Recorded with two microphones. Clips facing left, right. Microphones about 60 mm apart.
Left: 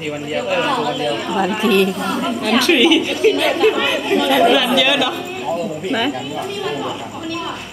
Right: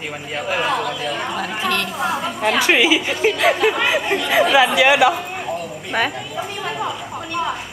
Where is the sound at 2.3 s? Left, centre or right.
Centre.